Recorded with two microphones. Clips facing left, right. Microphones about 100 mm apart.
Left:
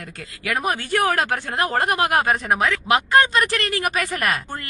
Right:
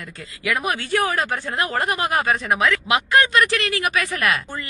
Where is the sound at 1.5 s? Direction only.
50° left (ahead or behind).